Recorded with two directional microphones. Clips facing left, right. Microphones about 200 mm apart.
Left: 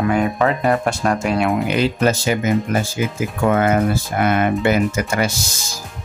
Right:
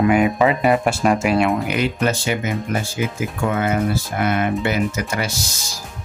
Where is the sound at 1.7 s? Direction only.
30° left (ahead or behind).